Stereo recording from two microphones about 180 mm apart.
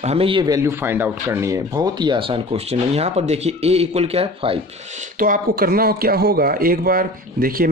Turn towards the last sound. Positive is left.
turn(degrees=-55)  # may be behind; listen again after turning